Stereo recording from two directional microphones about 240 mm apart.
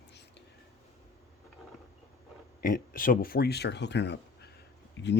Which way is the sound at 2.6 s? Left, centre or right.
Left.